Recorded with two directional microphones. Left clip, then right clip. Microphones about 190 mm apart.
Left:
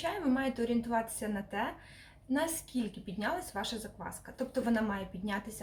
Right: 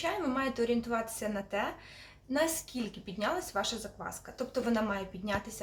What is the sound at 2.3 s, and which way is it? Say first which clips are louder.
A woman's voice: right 2 dB; 15° right (ahead or behind).